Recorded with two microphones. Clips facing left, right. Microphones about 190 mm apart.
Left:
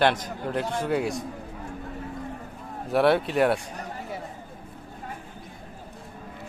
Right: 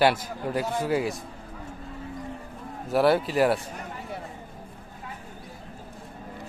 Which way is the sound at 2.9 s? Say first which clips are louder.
Even; centre (ahead or behind).